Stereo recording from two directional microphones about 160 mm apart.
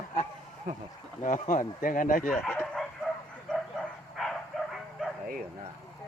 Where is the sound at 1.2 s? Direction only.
50° left (ahead or behind).